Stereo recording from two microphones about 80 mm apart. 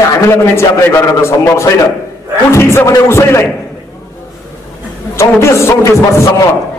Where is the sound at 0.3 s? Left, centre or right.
Left.